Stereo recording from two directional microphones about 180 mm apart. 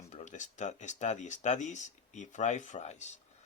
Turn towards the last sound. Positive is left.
turn(degrees=40)  # may be behind; listen again after turning